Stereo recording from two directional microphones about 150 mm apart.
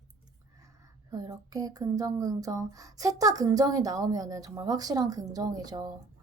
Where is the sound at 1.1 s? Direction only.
25° right (ahead or behind).